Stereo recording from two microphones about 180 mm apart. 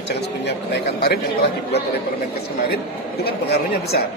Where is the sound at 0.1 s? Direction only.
65° left (ahead or behind).